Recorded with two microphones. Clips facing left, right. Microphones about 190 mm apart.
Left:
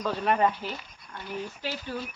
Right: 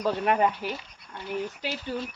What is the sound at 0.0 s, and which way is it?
Speech, 10° right (ahead or behind).